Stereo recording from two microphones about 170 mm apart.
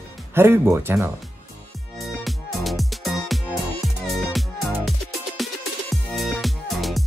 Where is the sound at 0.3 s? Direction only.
15° right (ahead or behind).